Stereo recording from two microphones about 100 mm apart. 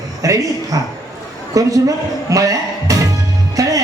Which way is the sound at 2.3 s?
35° right (ahead or behind).